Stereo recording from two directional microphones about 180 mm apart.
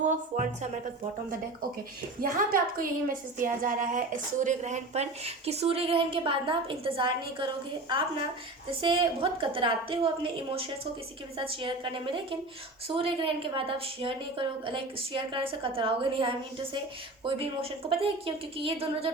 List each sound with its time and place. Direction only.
0.0 s a woman's voice: 40° right (ahead or behind)
2.2 s a woman's voice: 50° right (ahead or behind); by 7.4 s 30° right (ahead or behind)
8.8 s a woman's voice: 30° right (ahead or behind)